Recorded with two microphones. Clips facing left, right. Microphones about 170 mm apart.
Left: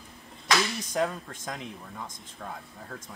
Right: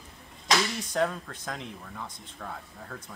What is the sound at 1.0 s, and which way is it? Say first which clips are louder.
Speech: right 1 dB; 10° left (ahead or behind).